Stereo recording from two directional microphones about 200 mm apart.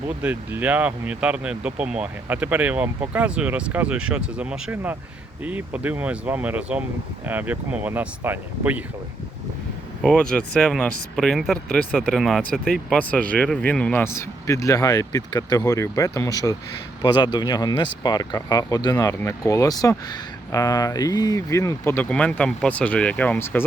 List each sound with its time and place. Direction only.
0.2 s speech: 5° right (ahead or behind)
10.0 s speech: 5° left (ahead or behind)